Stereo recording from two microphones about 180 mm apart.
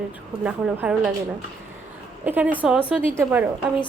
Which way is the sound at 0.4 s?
5° right (ahead or behind).